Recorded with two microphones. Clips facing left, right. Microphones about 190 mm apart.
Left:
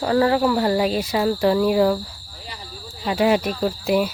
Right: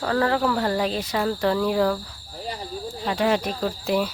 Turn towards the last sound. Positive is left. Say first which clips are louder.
# left 4 dB
turn(degrees=10)  # may be behind; listen again after turning